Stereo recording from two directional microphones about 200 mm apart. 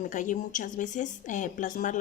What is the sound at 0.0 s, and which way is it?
A woman's voice, 40° left (ahead or behind).